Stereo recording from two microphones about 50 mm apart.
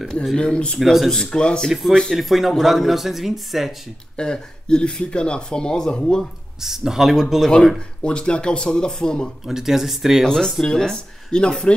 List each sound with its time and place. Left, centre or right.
0.4 s speech: centre
1.7 s speech: centre
4.2 s speech: centre
6.6 s speech: centre
7.5 s speech: centre
9.5 s speech: centre
10.2 s speech: centre